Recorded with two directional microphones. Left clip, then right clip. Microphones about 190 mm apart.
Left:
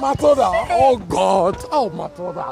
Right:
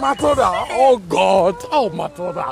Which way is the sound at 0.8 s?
10° left (ahead or behind).